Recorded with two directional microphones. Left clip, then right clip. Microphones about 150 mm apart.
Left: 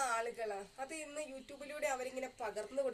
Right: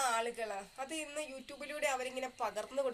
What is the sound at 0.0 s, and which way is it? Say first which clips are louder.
A woman's voice: right 3 dB; 20° left (ahead or behind).